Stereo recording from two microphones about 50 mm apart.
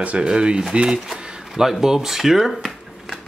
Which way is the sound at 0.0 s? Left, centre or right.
Right.